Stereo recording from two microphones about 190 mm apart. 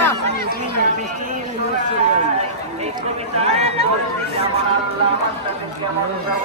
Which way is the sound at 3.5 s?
35° right (ahead or behind).